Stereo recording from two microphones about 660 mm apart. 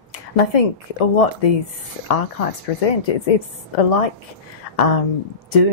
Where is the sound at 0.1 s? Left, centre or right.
Left.